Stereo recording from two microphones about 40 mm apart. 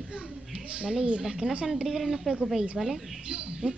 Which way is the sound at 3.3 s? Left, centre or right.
Right.